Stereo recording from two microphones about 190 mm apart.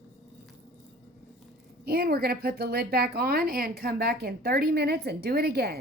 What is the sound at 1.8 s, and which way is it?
A woman's voice, 55° right (ahead or behind).